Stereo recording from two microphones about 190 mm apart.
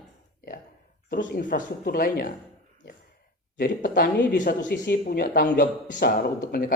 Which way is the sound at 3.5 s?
50° left (ahead or behind).